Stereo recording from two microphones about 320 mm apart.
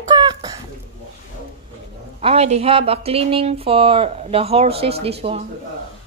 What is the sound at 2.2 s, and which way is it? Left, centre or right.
Speech, centre.